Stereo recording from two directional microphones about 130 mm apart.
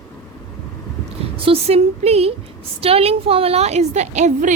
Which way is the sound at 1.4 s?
45° right (ahead or behind).